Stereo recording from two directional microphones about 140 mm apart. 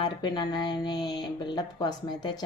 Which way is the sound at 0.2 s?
30° left (ahead or behind).